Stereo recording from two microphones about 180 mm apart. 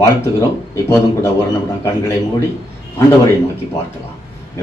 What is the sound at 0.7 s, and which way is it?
Speech, 15° left (ahead or behind).